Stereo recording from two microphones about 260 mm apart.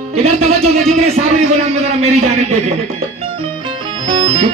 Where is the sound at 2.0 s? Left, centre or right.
Right.